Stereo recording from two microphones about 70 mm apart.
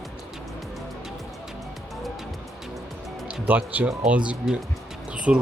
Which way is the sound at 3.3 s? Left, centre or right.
Right.